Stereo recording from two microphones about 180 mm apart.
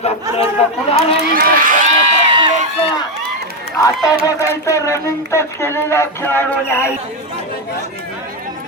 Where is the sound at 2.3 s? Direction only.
30° right (ahead or behind).